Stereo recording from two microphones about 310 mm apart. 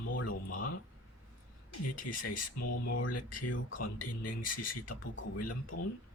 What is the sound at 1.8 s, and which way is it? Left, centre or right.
Speech, left.